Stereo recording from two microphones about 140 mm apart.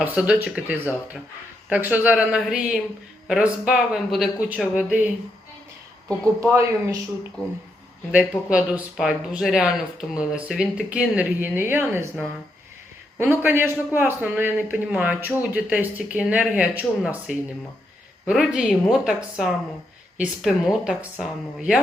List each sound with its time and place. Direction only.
0.0 s speech: 10° right (ahead or behind)
6.4 s speech: 20° right (ahead or behind)
8.1 s speech: 5° right (ahead or behind)
13.4 s a woman's voice: 15° right (ahead or behind)